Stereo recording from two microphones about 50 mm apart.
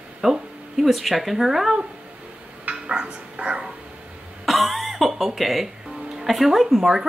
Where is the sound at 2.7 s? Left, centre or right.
Right.